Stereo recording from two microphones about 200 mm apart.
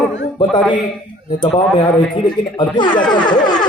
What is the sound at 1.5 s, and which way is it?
A man's voice, 20° left (ahead or behind).